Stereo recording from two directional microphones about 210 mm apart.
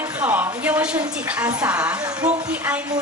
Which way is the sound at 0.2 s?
5° right (ahead or behind).